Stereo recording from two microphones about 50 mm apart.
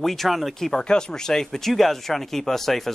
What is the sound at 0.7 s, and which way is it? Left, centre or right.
Speech, centre.